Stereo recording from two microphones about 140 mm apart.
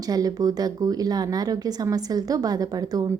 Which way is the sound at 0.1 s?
25° right (ahead or behind).